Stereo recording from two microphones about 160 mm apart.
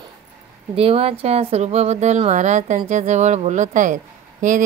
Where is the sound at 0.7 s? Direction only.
40° right (ahead or behind).